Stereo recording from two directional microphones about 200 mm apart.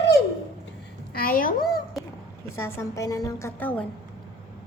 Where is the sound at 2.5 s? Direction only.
10° left (ahead or behind).